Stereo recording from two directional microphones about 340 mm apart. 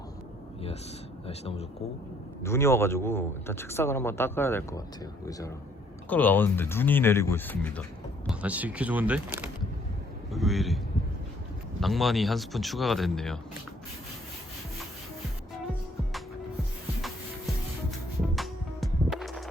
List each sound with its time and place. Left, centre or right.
1.3 s speech: centre
2.4 s speech: centre
6.1 s speech: centre
11.8 s speech: centre
18.3 s music: centre